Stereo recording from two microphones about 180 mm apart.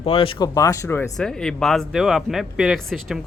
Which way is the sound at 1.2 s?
5° left (ahead or behind).